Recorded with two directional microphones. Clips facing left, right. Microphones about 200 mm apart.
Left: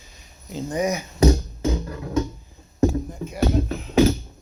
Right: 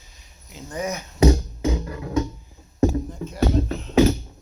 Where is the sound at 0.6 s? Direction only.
15° left (ahead or behind).